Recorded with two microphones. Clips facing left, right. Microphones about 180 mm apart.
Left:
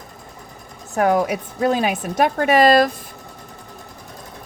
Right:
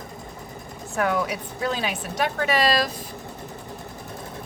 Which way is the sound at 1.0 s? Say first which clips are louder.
Left 6 dB; 40° left (ahead or behind).